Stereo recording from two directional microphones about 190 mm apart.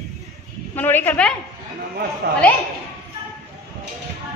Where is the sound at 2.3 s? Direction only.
55° right (ahead or behind).